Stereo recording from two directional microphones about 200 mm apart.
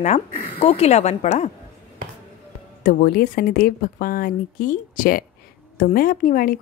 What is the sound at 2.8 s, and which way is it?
Speech, 50° left (ahead or behind).